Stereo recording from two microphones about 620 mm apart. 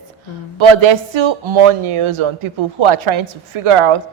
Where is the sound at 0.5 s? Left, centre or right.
Right.